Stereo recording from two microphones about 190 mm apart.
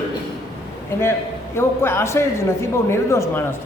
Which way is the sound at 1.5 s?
10° left (ahead or behind).